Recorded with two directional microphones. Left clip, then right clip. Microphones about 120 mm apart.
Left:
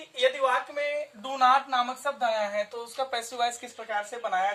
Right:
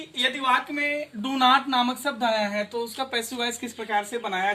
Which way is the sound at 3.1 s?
35° left (ahead or behind).